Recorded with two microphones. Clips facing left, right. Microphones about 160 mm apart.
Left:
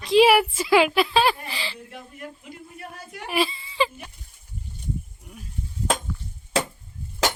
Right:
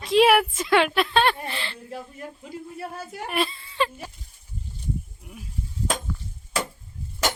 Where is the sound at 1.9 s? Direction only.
30° right (ahead or behind).